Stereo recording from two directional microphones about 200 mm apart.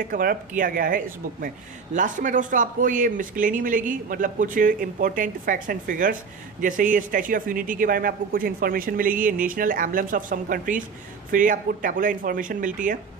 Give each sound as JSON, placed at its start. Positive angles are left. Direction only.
{"t": 0.1, "sound": "speech", "side_deg": -45}